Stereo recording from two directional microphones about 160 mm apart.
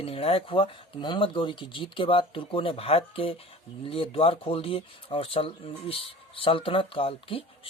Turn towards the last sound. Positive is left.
turn(degrees=35)  # may be behind; listen again after turning